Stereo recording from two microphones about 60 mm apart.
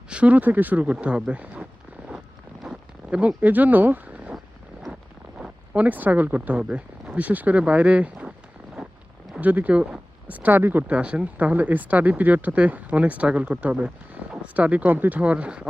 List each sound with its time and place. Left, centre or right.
0.1 s speech: right
3.1 s speech: right
5.4 s speech: right
6.6 s speech: centre
7.2 s speech: right
9.4 s speech: right
10.8 s speech: centre